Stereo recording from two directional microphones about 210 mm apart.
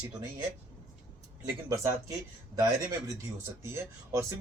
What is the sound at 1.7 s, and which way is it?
Speech, 15° right (ahead or behind).